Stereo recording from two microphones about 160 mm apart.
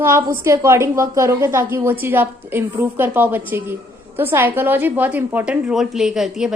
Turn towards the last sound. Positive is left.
turn(degrees=-5)  # may be behind; listen again after turning